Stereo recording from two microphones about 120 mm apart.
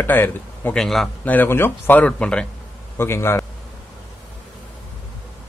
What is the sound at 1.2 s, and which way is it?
A man's voice, 15° left (ahead or behind).